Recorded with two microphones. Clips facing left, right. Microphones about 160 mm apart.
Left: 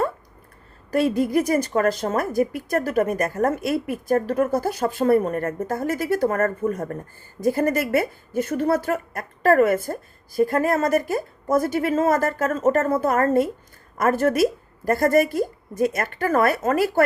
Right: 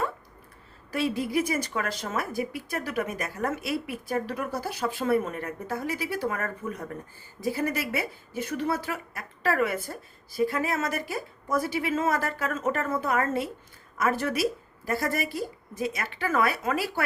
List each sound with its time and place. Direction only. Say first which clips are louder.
0.9 s a woman's voice: left 7 dB; 45° left (ahead or behind)